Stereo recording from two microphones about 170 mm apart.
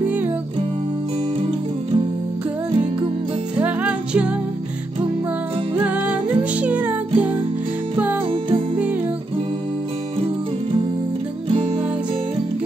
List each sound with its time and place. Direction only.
3.5 s music: 5° right (ahead or behind)
5.9 s music: 10° right (ahead or behind)
8.3 s music: 30° right (ahead or behind)